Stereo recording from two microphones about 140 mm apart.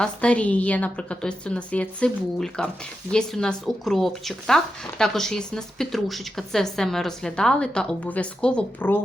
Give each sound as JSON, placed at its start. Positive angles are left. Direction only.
{"t": 0.0, "sound": "a woman's voice", "side_deg": 10}